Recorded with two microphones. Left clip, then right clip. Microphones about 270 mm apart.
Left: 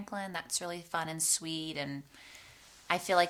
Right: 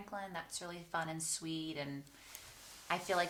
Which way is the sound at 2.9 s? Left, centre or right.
Left.